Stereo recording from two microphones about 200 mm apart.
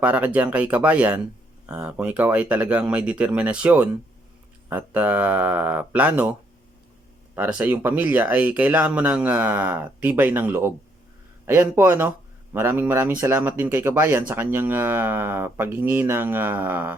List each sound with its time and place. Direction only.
0.0 s speech: 5° right (ahead or behind)
7.3 s speech: 10° right (ahead or behind)